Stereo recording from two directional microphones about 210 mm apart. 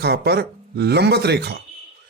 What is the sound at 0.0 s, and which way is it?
Speech, 50° right (ahead or behind).